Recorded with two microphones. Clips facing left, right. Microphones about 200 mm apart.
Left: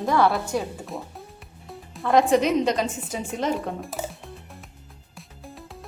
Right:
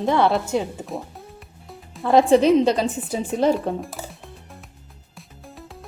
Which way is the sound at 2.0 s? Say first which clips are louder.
Right 4 dB; 30° right (ahead or behind).